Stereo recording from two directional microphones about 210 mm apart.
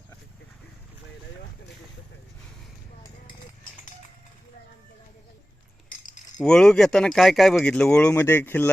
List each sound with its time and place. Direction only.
5.9 s cutlery: 40° left (ahead or behind)
6.4 s speech: 5° left (ahead or behind)